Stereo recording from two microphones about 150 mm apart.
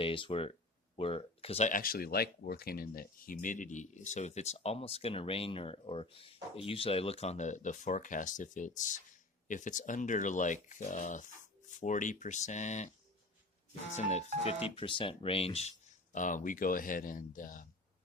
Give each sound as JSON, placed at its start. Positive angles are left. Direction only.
{"t": 0.0, "sound": "speech", "side_deg": 35}
{"t": 13.9, "sound": "speech", "side_deg": 50}
{"t": 16.1, "sound": "speech", "side_deg": 60}